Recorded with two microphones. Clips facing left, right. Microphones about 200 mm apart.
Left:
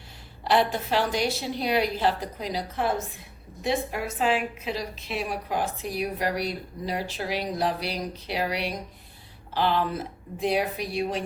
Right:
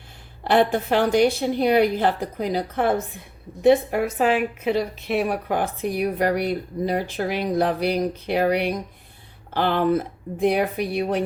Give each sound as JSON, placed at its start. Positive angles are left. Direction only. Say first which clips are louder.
{"t": 0.4, "sound": "a woman's voice", "louder": "right 5 dB", "side_deg": -55}